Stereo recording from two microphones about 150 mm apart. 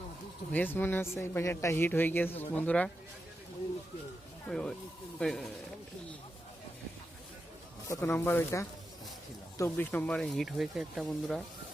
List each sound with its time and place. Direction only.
0.5 s speech: 10° left (ahead or behind)
4.4 s speech: 5° left (ahead or behind)
7.9 s speech: 15° left (ahead or behind); by 11.4 s centre (ahead or behind)